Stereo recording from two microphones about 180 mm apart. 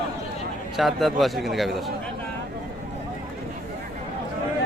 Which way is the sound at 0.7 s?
Centre (ahead or behind).